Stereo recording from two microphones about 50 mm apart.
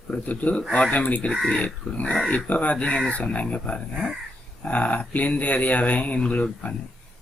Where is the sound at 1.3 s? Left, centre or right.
Centre.